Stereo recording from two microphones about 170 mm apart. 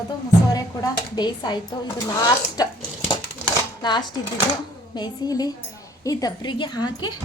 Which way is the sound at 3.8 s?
25° left (ahead or behind).